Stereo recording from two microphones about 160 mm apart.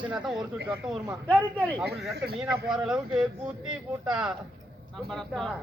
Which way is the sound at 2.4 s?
5° right (ahead or behind).